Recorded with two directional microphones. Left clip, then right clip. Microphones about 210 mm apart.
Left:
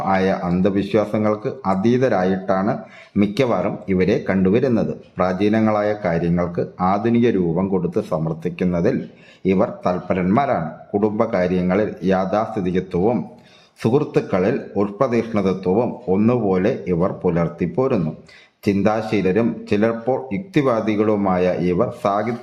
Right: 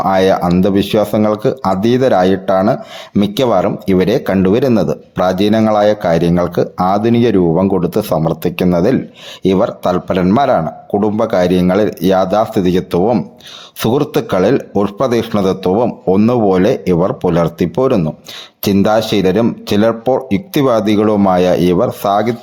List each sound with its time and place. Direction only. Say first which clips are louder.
0.1 s speech: right 6 dB; 35° right (ahead or behind)